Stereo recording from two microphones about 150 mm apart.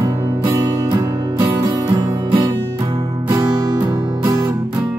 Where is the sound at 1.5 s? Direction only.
20° right (ahead or behind).